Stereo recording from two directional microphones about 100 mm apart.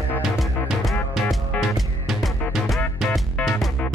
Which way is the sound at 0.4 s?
Centre (ahead or behind).